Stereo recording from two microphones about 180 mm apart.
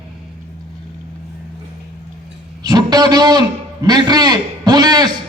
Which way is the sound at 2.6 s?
25° right (ahead or behind).